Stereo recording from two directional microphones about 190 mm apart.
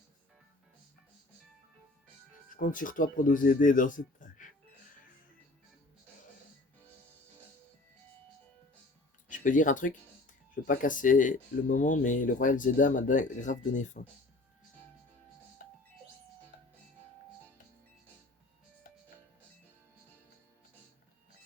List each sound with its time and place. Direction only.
2.6 s speech: 45° left (ahead or behind)
9.3 s speech: 45° left (ahead or behind)